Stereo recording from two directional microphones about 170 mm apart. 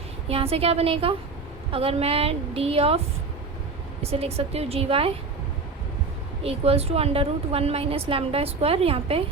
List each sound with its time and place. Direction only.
0.3 s a woman's voice: 35° right (ahead or behind)
4.0 s a woman's voice: 35° right (ahead or behind)
6.4 s a woman's voice: 35° right (ahead or behind)